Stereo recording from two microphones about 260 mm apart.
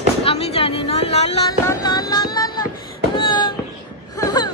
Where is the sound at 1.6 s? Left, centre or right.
Centre.